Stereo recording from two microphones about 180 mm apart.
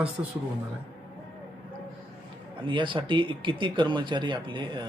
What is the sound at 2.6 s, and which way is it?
Speech, 25° right (ahead or behind).